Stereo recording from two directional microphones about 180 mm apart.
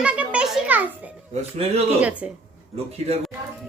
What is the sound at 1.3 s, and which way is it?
Speech, 35° right (ahead or behind).